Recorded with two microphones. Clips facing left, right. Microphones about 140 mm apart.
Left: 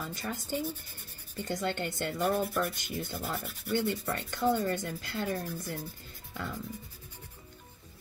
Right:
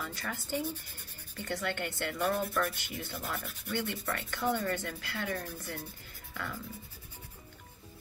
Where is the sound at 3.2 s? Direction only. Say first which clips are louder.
Left 2 dB; centre (ahead or behind).